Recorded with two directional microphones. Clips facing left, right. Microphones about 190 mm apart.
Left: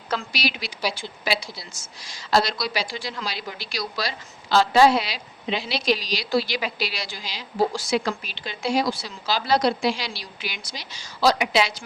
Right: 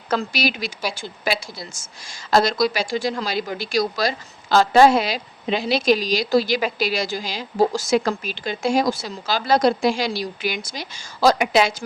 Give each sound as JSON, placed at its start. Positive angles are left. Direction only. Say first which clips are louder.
{"t": 0.1, "sound": "a woman's voice", "louder": "right 5 dB", "side_deg": -45}